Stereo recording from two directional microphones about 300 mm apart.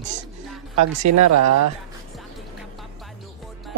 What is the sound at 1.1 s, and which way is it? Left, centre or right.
Speech, right.